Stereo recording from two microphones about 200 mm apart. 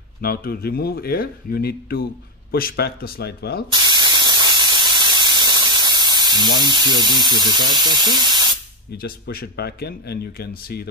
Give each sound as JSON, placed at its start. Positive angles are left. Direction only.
{"t": 0.2, "sound": "speech", "side_deg": 50}
{"t": 3.7, "sound": "spray", "side_deg": -20}
{"t": 6.6, "sound": "speech", "side_deg": -20}
{"t": 8.9, "sound": "speech", "side_deg": 50}